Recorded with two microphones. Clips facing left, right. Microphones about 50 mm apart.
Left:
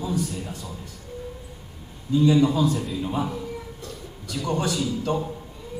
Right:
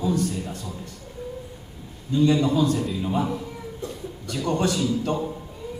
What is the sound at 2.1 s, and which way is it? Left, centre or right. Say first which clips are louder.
A man's voice: left 1 dB; centre.